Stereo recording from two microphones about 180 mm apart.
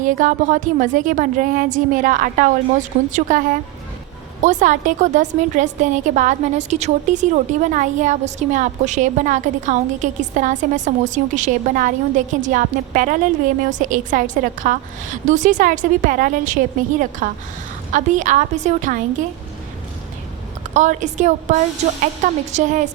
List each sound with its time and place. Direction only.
0.0 s a woman's voice: 45° right (ahead or behind)
20.7 s a woman's voice: 40° right (ahead or behind)